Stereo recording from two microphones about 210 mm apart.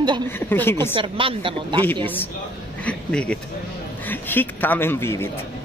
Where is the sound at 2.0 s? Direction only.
10° left (ahead or behind).